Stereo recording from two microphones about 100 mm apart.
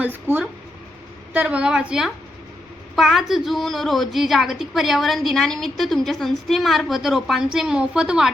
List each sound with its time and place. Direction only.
0.0 s a woman's voice: 20° right (ahead or behind)